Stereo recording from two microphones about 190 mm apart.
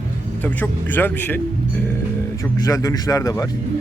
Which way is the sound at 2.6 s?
20° left (ahead or behind).